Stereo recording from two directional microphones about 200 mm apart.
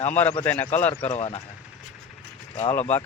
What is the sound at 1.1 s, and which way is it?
Speech, 30° left (ahead or behind).